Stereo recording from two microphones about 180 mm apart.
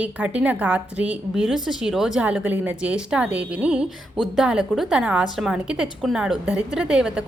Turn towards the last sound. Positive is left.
turn(degrees=-5)  # may be behind; listen again after turning